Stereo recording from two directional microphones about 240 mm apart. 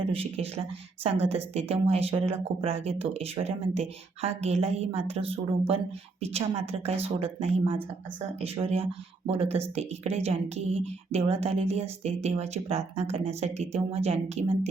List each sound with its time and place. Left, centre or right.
0.0 s speech: right